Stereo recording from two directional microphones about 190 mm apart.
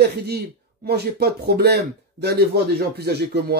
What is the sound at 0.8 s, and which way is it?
Speech, 60° right (ahead or behind).